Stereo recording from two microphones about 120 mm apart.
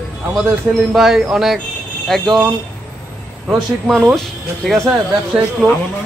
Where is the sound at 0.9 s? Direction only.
5° right (ahead or behind).